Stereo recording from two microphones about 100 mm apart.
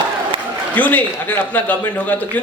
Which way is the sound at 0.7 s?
15° left (ahead or behind).